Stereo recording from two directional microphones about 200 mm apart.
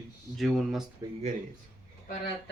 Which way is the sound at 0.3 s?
Centre (ahead or behind).